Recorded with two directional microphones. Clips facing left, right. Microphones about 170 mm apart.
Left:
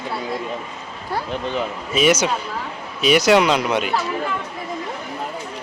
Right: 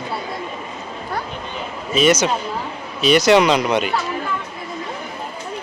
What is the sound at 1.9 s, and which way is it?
Speech, 10° left (ahead or behind).